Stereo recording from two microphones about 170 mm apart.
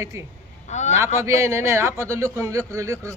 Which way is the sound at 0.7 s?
40° left (ahead or behind).